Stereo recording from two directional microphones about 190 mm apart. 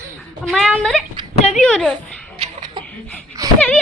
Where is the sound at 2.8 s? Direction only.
25° right (ahead or behind).